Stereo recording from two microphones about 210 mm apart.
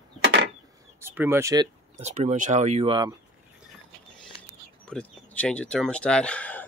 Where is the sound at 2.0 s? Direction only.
30° right (ahead or behind).